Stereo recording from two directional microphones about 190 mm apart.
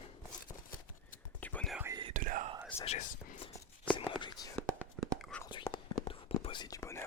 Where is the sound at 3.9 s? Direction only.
25° left (ahead or behind).